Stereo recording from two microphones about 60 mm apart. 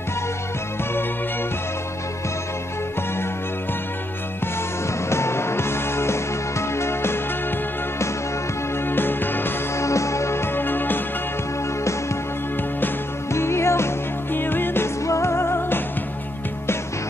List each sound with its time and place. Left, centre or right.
5.1 s music: left
8.8 s music: left
9.8 s music: left
13.3 s music: left
15.0 s music: left